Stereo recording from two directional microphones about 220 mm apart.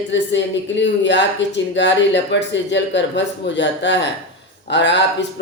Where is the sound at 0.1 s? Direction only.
55° left (ahead or behind).